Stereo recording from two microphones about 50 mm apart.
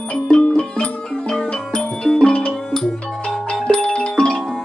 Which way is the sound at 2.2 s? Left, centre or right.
Left.